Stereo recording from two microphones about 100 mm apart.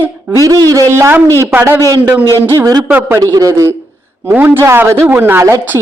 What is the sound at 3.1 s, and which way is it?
Speech, 35° right (ahead or behind).